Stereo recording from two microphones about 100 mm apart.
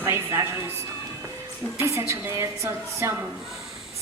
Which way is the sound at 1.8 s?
30° right (ahead or behind).